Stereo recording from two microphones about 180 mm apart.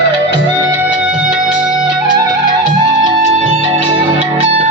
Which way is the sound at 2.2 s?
25° right (ahead or behind).